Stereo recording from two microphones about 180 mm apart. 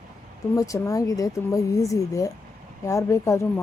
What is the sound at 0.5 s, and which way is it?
A woman's voice, 20° left (ahead or behind).